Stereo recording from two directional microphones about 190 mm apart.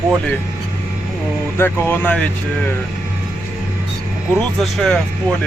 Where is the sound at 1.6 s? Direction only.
10° left (ahead or behind).